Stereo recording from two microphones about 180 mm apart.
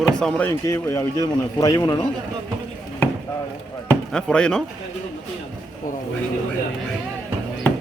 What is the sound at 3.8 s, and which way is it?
Speech, 5° left (ahead or behind).